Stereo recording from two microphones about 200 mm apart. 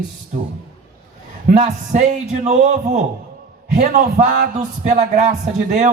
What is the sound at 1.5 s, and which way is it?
Speech, 40° right (ahead or behind).